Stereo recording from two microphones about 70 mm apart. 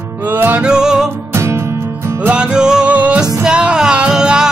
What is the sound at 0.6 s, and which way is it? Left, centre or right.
Music, centre.